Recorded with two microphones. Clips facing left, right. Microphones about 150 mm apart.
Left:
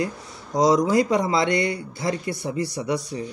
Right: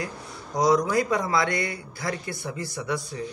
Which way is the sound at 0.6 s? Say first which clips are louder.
Left 3 dB; 20° left (ahead or behind).